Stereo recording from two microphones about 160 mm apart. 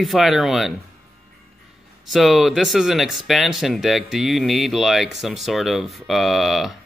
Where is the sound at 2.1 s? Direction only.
Centre (ahead or behind).